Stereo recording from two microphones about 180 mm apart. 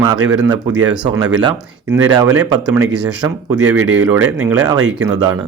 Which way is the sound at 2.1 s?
20° right (ahead or behind).